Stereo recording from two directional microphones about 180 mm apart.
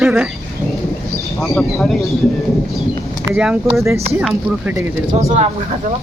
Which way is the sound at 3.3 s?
5° right (ahead or behind).